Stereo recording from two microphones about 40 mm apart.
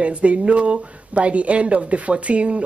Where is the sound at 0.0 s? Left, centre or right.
Right.